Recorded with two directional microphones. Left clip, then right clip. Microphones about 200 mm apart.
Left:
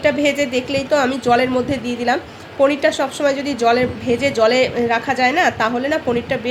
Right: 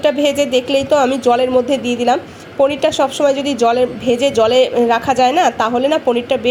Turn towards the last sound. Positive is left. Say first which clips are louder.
# right 4 dB
turn(degrees=-20)  # may be behind; listen again after turning